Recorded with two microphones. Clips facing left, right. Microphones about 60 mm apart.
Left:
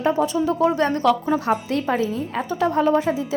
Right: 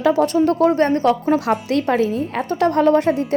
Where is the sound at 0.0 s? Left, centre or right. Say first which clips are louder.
Right 4 dB; right.